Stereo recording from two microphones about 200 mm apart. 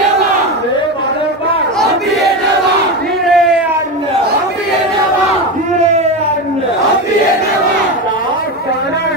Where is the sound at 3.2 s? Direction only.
Centre (ahead or behind).